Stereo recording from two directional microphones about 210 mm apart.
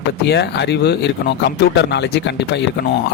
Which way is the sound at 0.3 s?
55° left (ahead or behind).